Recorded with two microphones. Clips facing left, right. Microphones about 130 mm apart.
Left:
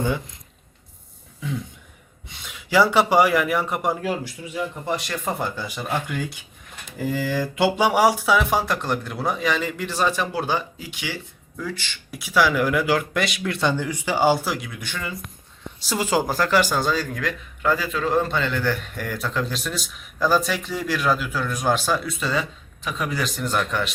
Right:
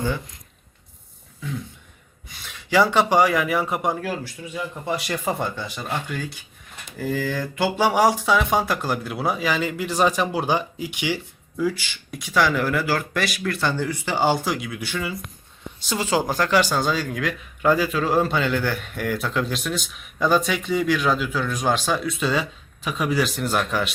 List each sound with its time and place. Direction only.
2.5 s speech: 10° left (ahead or behind)
4.0 s speech: 15° left (ahead or behind)
4.5 s speech: 5° right (ahead or behind)
5.4 s a man's voice: 10° left (ahead or behind); by 11.9 s 10° right (ahead or behind)
12.1 s speech: 5° left (ahead or behind)
15.9 s a man's voice: 10° left (ahead or behind)
17.6 s a man's voice: 15° right (ahead or behind)